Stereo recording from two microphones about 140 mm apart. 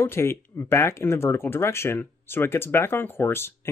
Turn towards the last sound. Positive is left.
turn(degrees=15)  # may be behind; listen again after turning